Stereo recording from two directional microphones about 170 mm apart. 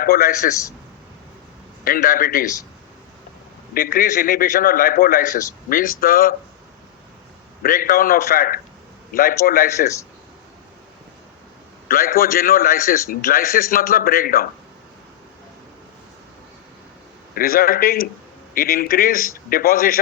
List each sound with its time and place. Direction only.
0.0 s a man's voice: 60° left (ahead or behind)
1.8 s a man's voice: 55° left (ahead or behind)
3.8 s a man's voice: 55° left (ahead or behind)
7.6 s a man's voice: 55° left (ahead or behind)
11.9 s a man's voice: 60° left (ahead or behind)
17.3 s a man's voice: 60° left (ahead or behind)